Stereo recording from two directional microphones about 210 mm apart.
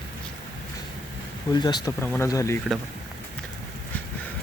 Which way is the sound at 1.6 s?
20° left (ahead or behind).